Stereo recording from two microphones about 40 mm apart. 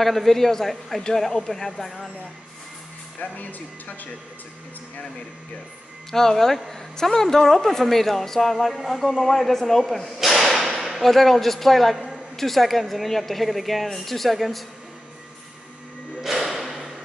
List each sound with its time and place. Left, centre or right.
0.0 s a woman's voice: centre
3.2 s speech: left
6.1 s a woman's voice: centre
16.2 s a sound: centre